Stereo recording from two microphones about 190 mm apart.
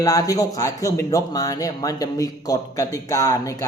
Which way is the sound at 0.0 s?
20° left (ahead or behind).